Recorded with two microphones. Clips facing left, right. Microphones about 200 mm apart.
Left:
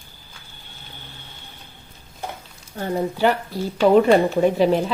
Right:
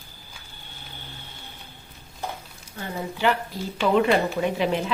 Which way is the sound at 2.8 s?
40° left (ahead or behind).